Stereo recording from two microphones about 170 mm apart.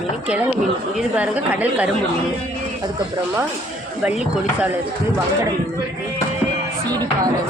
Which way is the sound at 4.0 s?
5° right (ahead or behind).